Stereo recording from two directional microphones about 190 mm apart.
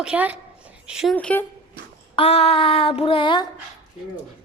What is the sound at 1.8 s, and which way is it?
Child singing, 30° left (ahead or behind).